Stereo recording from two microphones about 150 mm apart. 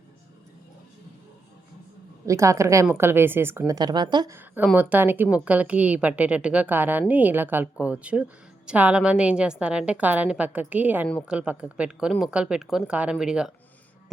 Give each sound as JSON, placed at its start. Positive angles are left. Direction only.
{"t": 2.2, "sound": "a woman's voice", "side_deg": -20}
{"t": 3.8, "sound": "a woman's voice", "side_deg": -30}
{"t": 4.3, "sound": "a woman's voice", "side_deg": -15}